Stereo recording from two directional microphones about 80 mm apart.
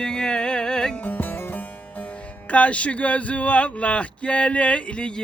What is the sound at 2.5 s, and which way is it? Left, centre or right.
Speech, centre.